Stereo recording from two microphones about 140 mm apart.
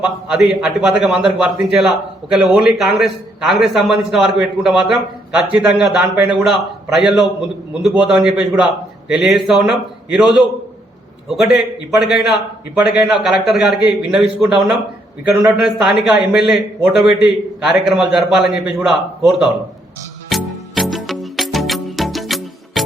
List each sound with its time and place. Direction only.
0.0 s a man's voice: 5° right (ahead or behind)
20.3 s music: centre (ahead or behind)